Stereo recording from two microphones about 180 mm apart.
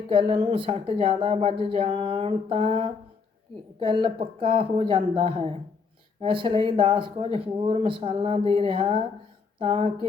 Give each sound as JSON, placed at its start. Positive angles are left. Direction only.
{"t": 0.1, "sound": "a woman's voice", "side_deg": -30}